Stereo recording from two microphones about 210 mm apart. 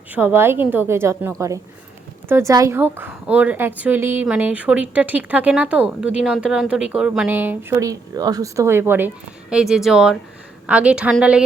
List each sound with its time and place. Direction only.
0.1 s speech: 10° right (ahead or behind)
2.3 s a woman's voice: 15° right (ahead or behind)